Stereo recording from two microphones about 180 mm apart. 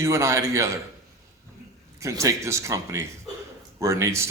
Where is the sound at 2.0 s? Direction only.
15° right (ahead or behind).